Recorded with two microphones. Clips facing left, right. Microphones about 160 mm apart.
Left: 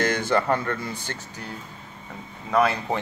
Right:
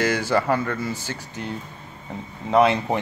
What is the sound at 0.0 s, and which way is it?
Speech, 10° right (ahead or behind).